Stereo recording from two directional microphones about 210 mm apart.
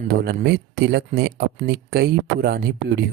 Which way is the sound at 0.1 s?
50° right (ahead or behind).